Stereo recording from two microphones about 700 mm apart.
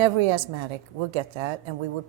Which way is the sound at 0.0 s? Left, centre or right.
Right.